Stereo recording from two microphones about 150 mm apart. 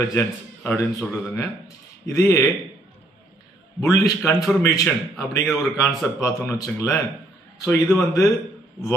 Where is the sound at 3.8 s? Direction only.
20° left (ahead or behind).